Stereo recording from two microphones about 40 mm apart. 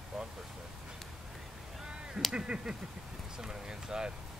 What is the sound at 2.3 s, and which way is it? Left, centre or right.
Honk, right.